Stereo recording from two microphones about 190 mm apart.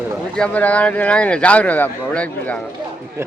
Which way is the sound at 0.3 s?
5° left (ahead or behind).